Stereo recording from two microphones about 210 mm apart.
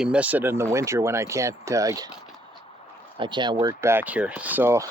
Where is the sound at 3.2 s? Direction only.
20° right (ahead or behind).